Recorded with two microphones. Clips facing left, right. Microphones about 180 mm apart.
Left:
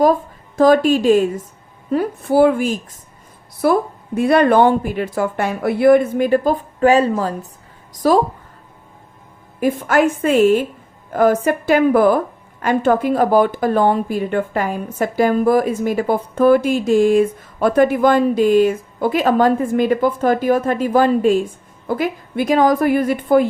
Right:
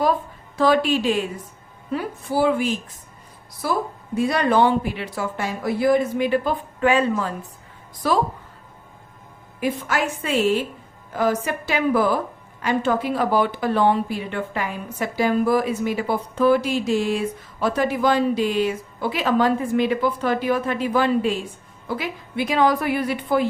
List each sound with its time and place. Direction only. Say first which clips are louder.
0.0 s a woman's voice: left 7 dB; 45° left (ahead or behind)
3.6 s a woman's voice: left 8 dB; 60° left (ahead or behind); by 8.2 s 40° left (ahead or behind)
9.6 s speech: left 8 dB; 50° left (ahead or behind)